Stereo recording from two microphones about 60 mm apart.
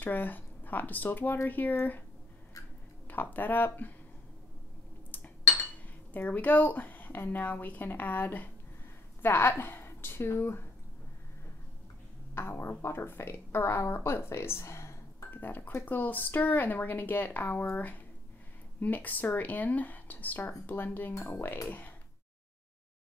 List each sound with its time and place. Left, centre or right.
0.0 s speech: left
3.1 s speech: left
5.1 s a sound: left
6.1 s a woman's voice: left
12.4 s speech: left
15.3 s speech: left